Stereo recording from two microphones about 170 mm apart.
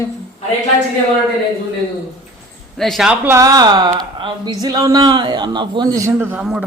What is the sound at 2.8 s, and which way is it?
Speech, centre (ahead or behind).